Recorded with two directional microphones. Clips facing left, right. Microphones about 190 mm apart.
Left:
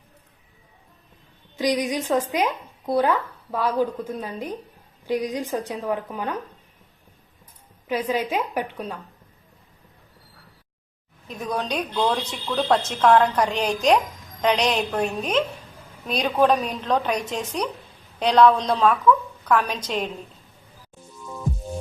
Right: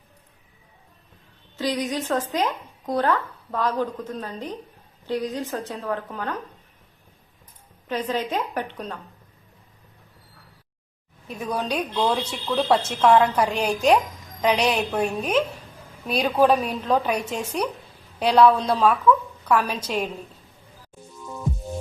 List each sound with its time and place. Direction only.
1.5 s speech: 15° left (ahead or behind)
7.9 s speech: 10° left (ahead or behind)
11.3 s speech: 5° right (ahead or behind)